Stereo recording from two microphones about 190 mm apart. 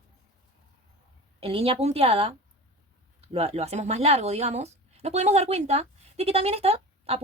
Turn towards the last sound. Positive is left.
turn(degrees=-30)  # may be behind; listen again after turning